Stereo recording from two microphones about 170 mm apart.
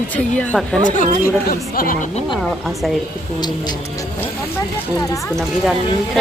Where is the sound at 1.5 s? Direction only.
60° left (ahead or behind).